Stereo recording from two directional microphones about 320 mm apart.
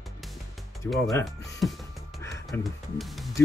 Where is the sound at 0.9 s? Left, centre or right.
Centre.